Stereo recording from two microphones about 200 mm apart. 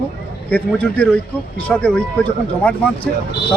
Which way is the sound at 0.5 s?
5° left (ahead or behind).